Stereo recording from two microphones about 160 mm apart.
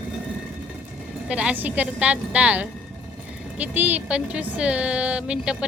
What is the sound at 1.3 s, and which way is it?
Speech, 5° right (ahead or behind).